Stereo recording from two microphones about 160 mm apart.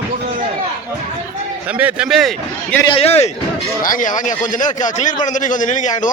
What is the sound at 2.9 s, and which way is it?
Speech, 40° left (ahead or behind).